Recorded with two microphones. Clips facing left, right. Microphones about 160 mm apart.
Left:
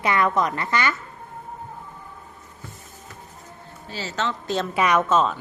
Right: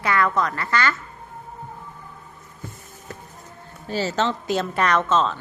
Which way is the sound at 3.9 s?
45° right (ahead or behind).